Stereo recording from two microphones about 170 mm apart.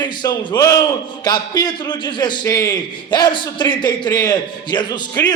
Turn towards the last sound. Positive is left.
turn(degrees=25)  # may be behind; listen again after turning